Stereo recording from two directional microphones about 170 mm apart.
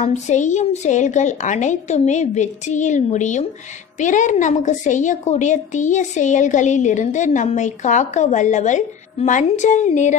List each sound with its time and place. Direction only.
0.0 s a woman's voice: 45° left (ahead or behind)